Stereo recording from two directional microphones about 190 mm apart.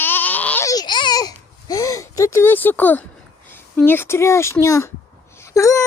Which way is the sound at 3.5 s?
10° left (ahead or behind).